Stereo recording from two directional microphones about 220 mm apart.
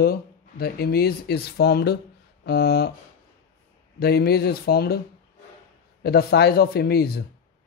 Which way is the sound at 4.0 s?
45° left (ahead or behind).